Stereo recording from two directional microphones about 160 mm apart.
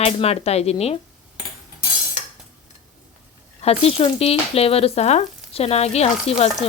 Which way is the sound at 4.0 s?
40° left (ahead or behind).